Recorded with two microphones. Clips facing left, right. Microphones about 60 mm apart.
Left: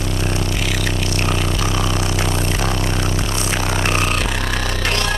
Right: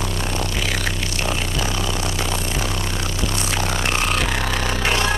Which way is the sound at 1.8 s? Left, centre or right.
Left.